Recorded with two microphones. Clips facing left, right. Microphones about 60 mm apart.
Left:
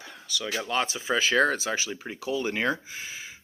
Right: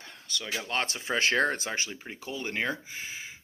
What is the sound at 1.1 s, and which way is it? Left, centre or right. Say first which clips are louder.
Speech: left 3 dB; centre.